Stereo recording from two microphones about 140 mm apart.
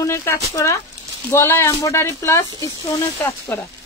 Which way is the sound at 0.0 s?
20° left (ahead or behind).